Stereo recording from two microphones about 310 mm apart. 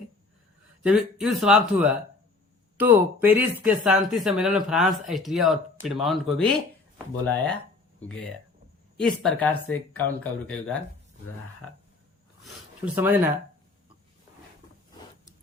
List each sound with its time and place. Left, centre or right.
0.8 s speech: centre
12.8 s speech: centre